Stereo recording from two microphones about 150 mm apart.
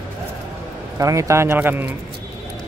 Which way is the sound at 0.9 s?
20° right (ahead or behind).